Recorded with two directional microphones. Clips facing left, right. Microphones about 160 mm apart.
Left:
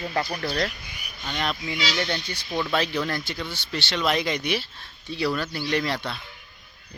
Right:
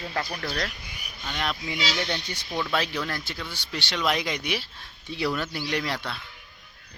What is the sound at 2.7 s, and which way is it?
Speech, 5° right (ahead or behind).